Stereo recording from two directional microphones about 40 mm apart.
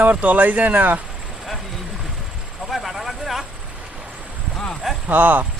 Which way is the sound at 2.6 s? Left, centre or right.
Centre.